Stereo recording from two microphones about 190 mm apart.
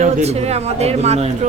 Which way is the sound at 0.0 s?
35° right (ahead or behind).